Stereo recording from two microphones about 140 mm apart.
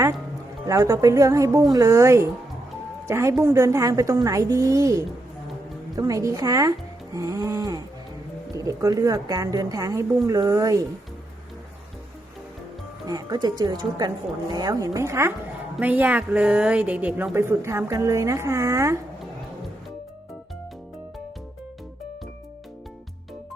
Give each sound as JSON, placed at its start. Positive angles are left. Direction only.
{"t": 0.7, "sound": "speech", "side_deg": -25}
{"t": 13.1, "sound": "a woman's voice", "side_deg": -25}